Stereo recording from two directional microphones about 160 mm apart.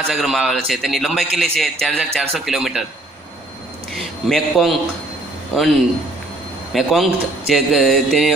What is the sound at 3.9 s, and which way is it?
A man's voice, centre (ahead or behind).